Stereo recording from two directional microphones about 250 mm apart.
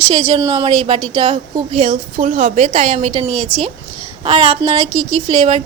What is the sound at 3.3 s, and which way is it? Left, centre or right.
Speech, centre.